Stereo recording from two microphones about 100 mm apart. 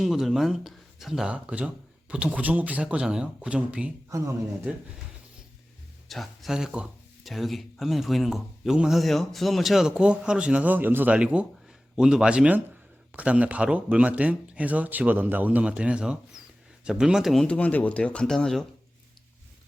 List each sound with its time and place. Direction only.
0.0 s speech: centre (ahead or behind)
6.1 s speech: centre (ahead or behind)
17.4 s speech: 15° left (ahead or behind)